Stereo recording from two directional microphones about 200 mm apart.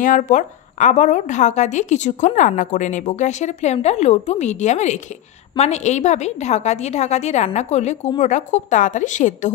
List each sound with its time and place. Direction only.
0.0 s a woman's voice: 40° left (ahead or behind)